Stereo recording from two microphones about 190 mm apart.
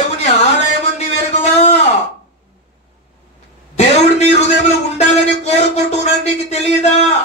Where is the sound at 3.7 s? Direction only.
35° left (ahead or behind).